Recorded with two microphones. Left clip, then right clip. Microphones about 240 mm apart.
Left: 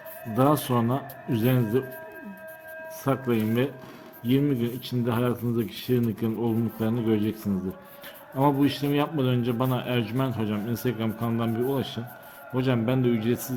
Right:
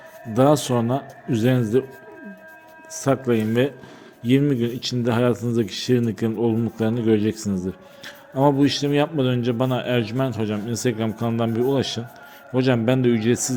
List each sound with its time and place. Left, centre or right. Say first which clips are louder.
0.3 s a man's voice: right 5 dB; centre
3.0 s a man's voice: right 6 dB; centre